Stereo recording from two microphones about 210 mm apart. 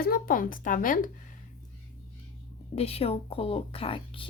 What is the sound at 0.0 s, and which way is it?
A woman's voice, 45° left (ahead or behind).